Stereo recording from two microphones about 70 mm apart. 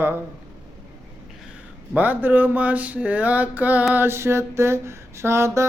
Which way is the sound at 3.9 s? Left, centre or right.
Right.